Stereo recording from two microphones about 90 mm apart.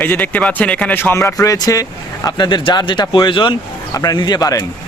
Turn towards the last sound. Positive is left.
turn(degrees=45)  # may be behind; listen again after turning